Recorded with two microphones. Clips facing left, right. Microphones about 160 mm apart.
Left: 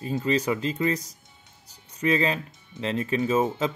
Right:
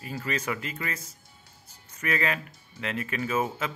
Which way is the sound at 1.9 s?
20° left (ahead or behind).